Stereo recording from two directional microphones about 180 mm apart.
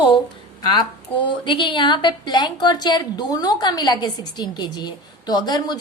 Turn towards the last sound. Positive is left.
turn(degrees=25)  # may be behind; listen again after turning